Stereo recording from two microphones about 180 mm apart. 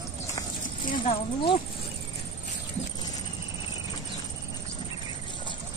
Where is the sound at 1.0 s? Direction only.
30° left (ahead or behind).